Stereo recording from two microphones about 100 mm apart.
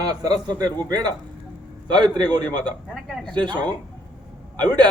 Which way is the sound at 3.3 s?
50° right (ahead or behind).